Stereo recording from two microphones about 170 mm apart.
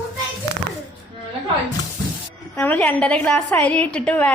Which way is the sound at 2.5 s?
10° left (ahead or behind).